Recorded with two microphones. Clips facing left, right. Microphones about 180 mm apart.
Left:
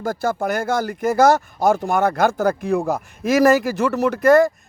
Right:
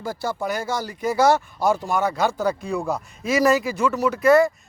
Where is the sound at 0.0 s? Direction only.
45° left (ahead or behind).